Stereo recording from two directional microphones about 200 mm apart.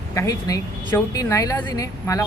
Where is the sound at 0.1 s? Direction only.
15° left (ahead or behind).